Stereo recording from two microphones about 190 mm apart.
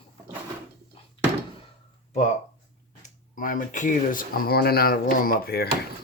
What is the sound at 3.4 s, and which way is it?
Speech, 45° left (ahead or behind).